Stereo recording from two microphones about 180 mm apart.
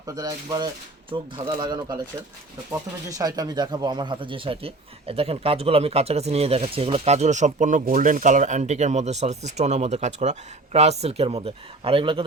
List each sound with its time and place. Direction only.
0.0 s speech: 20° right (ahead or behind)